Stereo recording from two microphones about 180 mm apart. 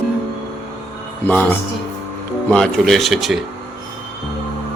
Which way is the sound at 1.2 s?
10° left (ahead or behind).